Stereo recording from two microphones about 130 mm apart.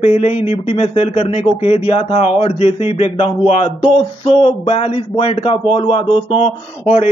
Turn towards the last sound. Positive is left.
turn(degrees=55)  # may be behind; listen again after turning